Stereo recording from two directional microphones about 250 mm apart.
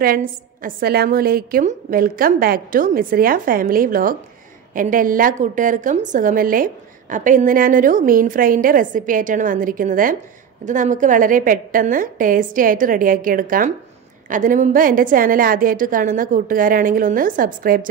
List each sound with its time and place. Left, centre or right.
0.0 s a woman's voice: right